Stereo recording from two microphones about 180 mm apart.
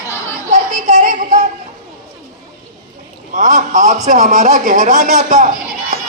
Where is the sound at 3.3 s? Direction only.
45° right (ahead or behind).